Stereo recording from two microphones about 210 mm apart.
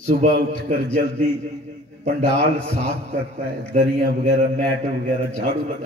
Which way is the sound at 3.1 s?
35° right (ahead or behind).